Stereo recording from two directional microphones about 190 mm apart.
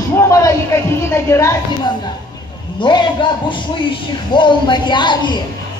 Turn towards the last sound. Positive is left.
turn(degrees=25)  # may be behind; listen again after turning